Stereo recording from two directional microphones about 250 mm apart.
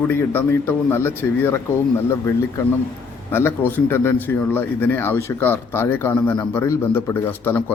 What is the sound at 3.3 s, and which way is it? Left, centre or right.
Speech, centre.